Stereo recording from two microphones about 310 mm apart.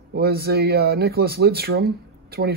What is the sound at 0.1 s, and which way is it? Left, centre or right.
Speech, right.